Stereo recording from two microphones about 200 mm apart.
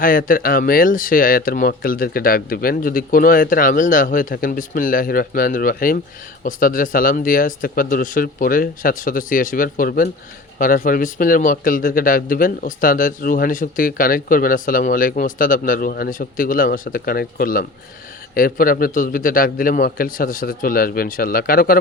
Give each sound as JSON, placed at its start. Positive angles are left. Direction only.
{"t": 0.0, "sound": "a man's voice", "side_deg": 45}